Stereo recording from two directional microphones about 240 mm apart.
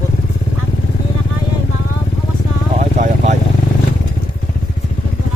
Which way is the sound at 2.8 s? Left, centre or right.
Right.